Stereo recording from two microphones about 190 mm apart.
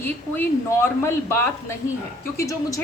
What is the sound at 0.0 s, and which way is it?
A woman's voice, 10° left (ahead or behind).